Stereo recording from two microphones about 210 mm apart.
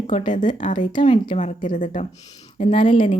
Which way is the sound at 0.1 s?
35° left (ahead or behind).